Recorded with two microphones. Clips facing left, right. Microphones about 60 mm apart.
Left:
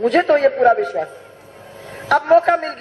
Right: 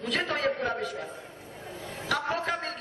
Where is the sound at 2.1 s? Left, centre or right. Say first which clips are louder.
Left 16 dB; left.